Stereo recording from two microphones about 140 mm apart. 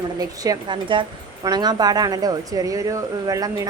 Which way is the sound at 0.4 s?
30° right (ahead or behind).